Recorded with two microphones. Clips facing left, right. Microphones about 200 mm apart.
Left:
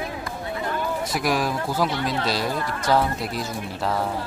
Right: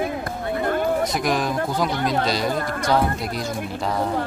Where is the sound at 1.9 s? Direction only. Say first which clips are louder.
Right 3 dB; 45° right (ahead or behind).